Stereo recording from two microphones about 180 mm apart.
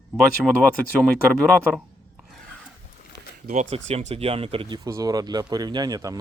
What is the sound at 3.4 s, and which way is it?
Speech, 40° right (ahead or behind).